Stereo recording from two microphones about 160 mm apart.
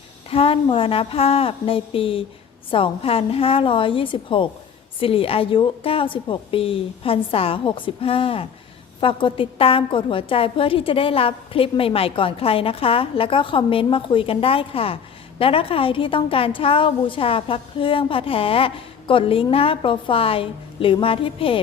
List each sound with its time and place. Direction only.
0.3 s a woman's voice: 35° left (ahead or behind)